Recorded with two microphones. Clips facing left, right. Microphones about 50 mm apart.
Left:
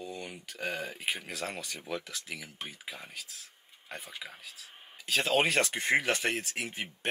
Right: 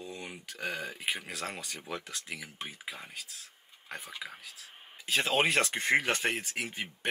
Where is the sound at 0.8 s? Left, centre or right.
Right.